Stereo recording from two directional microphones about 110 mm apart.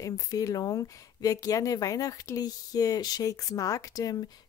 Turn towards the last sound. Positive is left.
turn(degrees=35)  # may be behind; listen again after turning